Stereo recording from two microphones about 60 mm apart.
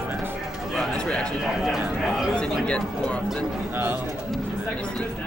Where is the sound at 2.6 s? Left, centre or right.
Centre.